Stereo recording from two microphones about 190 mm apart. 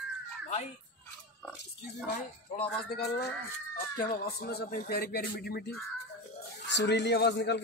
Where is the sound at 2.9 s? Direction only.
60° left (ahead or behind).